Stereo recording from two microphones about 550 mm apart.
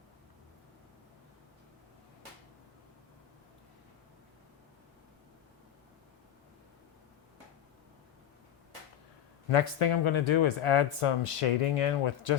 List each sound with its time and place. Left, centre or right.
9.5 s speech: left